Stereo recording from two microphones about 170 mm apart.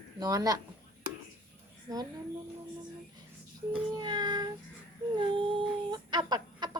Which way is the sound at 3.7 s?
25° right (ahead or behind).